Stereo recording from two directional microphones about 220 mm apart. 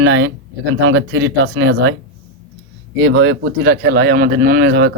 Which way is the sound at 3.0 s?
50° right (ahead or behind).